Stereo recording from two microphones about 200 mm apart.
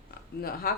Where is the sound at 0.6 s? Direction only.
45° left (ahead or behind).